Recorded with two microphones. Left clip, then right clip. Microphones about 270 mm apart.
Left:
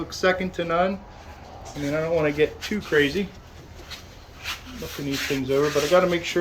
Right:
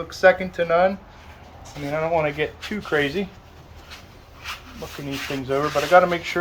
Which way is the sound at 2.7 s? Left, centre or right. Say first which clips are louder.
Left 1 dB; centre.